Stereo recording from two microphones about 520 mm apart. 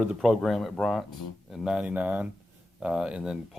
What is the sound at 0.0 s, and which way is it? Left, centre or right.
Speech, centre.